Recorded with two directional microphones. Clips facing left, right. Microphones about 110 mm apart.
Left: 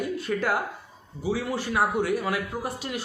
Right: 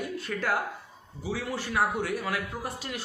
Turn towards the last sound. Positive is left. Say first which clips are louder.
# left 4 dB
turn(degrees=15)  # may be behind; listen again after turning